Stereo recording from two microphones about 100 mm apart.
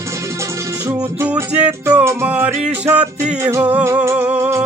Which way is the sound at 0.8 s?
35° right (ahead or behind).